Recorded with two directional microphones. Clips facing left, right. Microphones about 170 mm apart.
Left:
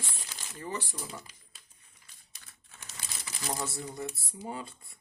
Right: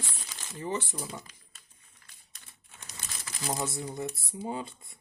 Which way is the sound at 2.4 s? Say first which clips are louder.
Right 1 dB; 25° right (ahead or behind).